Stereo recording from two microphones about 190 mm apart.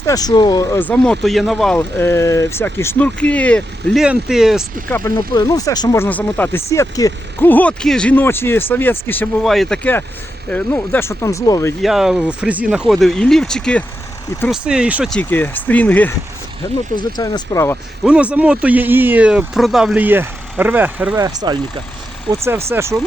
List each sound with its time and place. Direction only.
0.0 s speech: 20° left (ahead or behind); by 4.6 s 5° right (ahead or behind)
4.9 s speech: 15° left (ahead or behind)
11.8 s speech: centre (ahead or behind)
15.1 s speech: 10° left (ahead or behind)
16.9 s speech: 20° left (ahead or behind)
18.0 s speech: 5° right (ahead or behind)
21.2 s speech: 20° right (ahead or behind)
22.7 s speech: 15° right (ahead or behind)